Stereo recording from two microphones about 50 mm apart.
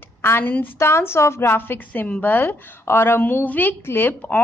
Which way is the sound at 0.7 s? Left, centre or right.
Left.